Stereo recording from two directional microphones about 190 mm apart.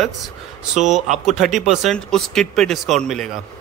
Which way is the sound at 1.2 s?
Centre (ahead or behind).